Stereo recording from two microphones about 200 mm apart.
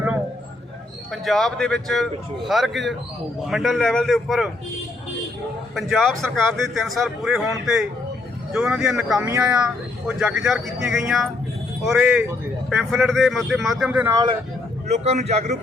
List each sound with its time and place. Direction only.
1.1 s a man's voice: centre (ahead or behind)
5.7 s a man's voice: centre (ahead or behind)
14.8 s a man's voice: 35° right (ahead or behind)